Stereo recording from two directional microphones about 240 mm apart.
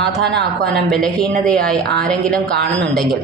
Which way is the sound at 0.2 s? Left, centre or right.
Right.